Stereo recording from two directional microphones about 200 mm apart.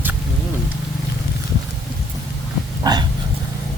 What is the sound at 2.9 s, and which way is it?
Dog, 20° right (ahead or behind).